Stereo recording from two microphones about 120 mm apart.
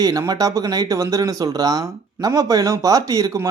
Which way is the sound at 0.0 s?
30° right (ahead or behind).